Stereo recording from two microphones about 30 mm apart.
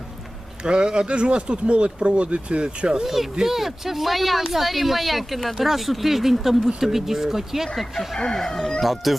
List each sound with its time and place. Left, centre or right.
0.6 s speech: right
2.9 s speech: centre
8.4 s speech: centre
8.8 s speech: centre